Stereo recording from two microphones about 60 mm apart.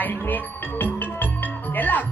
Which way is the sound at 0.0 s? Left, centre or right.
Left.